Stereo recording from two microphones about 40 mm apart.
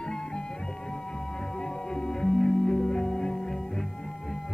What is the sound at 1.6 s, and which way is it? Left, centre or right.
Music, centre.